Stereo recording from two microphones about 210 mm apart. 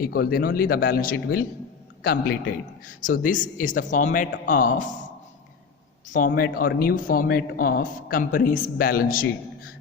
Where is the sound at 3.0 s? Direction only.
40° left (ahead or behind).